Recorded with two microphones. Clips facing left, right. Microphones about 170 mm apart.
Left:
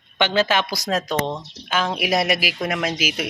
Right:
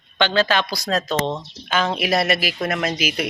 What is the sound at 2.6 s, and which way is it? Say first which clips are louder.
Speech: right 1 dB; centre (ahead or behind).